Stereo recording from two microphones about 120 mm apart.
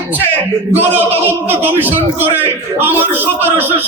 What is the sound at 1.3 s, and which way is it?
A man's voice, 15° right (ahead or behind).